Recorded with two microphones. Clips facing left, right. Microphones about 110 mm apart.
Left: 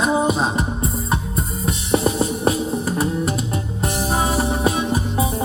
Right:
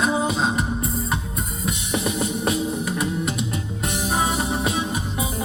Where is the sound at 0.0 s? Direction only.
25° left (ahead or behind).